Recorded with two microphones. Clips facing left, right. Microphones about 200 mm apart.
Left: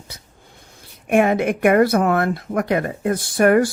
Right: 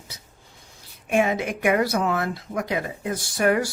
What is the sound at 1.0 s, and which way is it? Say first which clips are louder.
Speech: left 6 dB; 55° left (ahead or behind).